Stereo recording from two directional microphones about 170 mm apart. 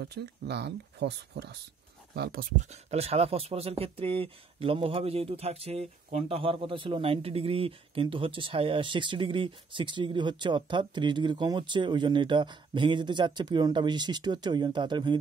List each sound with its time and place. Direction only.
0.0 s speech: 75° right (ahead or behind)
2.5 s speech: 40° right (ahead or behind)